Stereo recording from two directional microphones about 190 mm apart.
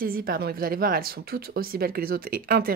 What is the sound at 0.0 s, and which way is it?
Speech, 50° right (ahead or behind).